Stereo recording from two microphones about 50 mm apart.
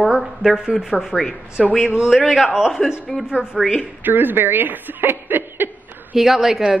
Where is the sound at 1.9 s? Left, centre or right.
Centre.